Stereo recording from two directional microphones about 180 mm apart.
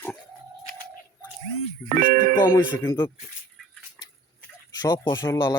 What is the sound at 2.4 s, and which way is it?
Speech, 20° left (ahead or behind).